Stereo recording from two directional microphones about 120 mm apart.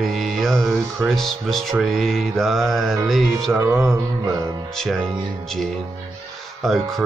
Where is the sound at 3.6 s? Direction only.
20° right (ahead or behind).